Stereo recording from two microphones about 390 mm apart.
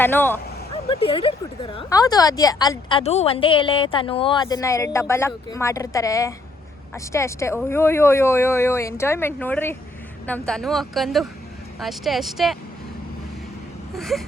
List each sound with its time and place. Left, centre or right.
0.0 s a woman's voice: centre
13.9 s a woman's voice: centre